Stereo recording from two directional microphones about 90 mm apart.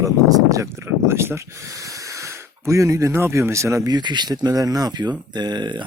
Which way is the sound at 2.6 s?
35° right (ahead or behind).